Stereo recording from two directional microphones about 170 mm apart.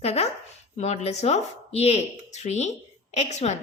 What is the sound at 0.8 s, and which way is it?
Speech, 40° left (ahead or behind).